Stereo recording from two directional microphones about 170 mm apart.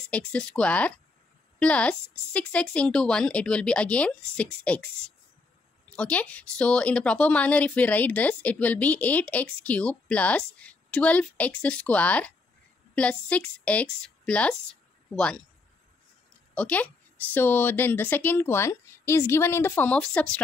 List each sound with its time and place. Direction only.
0.1 s a woman's voice: 5° left (ahead or behind)
5.9 s a woman's voice: 5° left (ahead or behind)
16.5 s a woman's voice: 10° left (ahead or behind)